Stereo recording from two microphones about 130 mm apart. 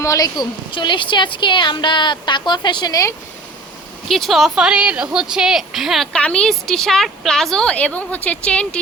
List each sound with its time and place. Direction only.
0.0 s a woman's voice: 25° left (ahead or behind)
4.1 s a woman's voice: centre (ahead or behind)